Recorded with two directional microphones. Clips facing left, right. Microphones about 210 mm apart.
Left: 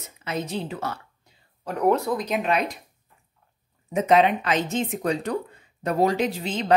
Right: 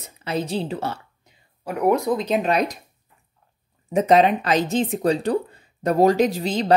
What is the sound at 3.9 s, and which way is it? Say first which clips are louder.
Speech: right 3 dB; 35° right (ahead or behind).